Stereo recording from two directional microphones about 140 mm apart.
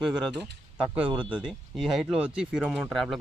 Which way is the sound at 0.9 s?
10° right (ahead or behind).